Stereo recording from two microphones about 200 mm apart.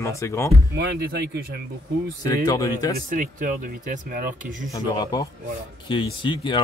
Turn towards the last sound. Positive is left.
turn(degrees=25)  # may be behind; listen again after turning